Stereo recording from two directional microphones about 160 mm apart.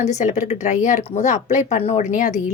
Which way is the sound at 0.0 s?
45° left (ahead or behind).